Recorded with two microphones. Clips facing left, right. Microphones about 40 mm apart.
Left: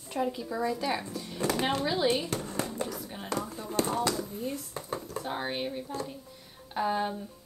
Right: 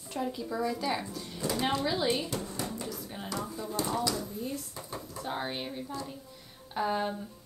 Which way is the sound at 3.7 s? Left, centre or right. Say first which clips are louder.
Left 3 dB; left.